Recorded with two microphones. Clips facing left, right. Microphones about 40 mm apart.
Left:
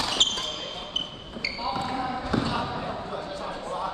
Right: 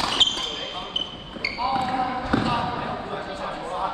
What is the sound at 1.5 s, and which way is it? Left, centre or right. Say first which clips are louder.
Basketball bounce: right 6 dB; right.